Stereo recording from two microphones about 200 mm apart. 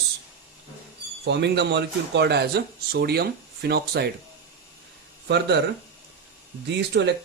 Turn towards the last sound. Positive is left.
turn(degrees=-60)  # may be behind; listen again after turning